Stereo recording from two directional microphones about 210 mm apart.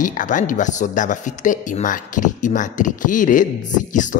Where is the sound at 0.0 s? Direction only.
40° left (ahead or behind).